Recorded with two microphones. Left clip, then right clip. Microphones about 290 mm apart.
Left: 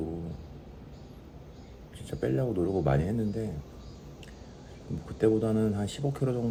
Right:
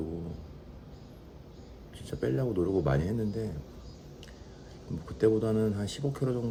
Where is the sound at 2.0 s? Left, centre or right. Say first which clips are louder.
Left 1 dB; centre.